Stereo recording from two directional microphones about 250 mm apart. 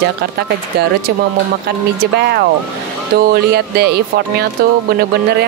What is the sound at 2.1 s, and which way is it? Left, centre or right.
Speech, right.